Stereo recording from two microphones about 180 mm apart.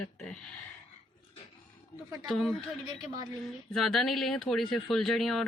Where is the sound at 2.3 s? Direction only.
Centre (ahead or behind).